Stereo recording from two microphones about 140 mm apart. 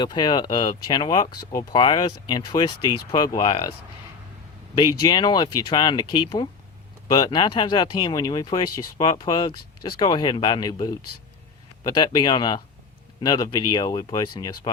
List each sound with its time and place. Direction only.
0.0 s speech: 30° left (ahead or behind)
4.7 s speech: 30° left (ahead or behind)